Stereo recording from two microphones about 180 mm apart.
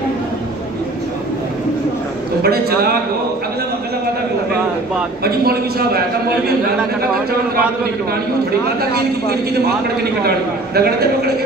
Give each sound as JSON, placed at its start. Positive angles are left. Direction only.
{"t": 2.4, "sound": "a man's voice", "side_deg": -60}
{"t": 5.2, "sound": "a man's voice", "side_deg": -60}
{"t": 8.9, "sound": "a man's voice", "side_deg": -60}